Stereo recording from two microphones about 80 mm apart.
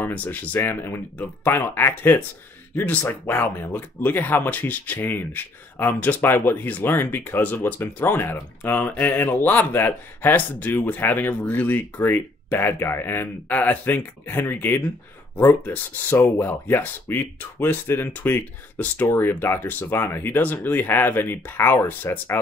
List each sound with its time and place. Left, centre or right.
0.0 s speech: left